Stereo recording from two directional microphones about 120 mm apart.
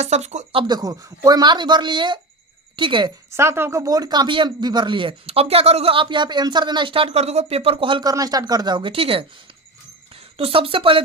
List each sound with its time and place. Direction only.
0.0 s speech: 70° right (ahead or behind)
0.5 s speech: 35° right (ahead or behind)
3.3 s speech: 20° right (ahead or behind); by 8.1 s 45° right (ahead or behind)
8.1 s speech: 30° right (ahead or behind)
8.9 s speech: 50° right (ahead or behind)
10.3 s speech: 50° right (ahead or behind)